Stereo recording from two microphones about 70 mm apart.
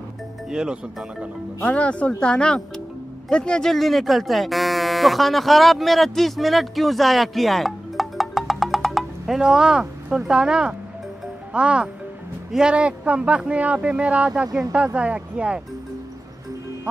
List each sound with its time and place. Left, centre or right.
0.5 s speech: centre
1.7 s speech: centre